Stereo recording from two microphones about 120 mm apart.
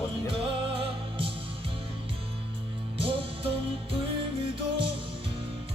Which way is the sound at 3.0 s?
50° right (ahead or behind).